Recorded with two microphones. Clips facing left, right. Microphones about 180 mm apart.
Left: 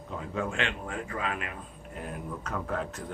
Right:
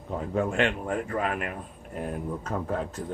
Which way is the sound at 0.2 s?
45° right (ahead or behind).